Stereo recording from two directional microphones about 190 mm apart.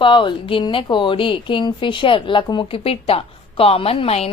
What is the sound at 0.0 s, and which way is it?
A woman's voice, 25° left (ahead or behind).